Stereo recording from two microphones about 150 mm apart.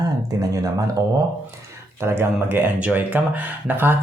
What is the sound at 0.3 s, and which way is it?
Speech, 25° right (ahead or behind).